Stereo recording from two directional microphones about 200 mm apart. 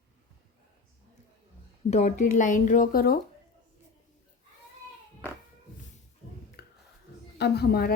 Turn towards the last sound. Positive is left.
turn(degrees=50)  # may be behind; listen again after turning